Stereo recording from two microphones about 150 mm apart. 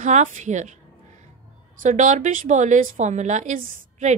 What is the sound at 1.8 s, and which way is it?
A woman's voice, 55° right (ahead or behind).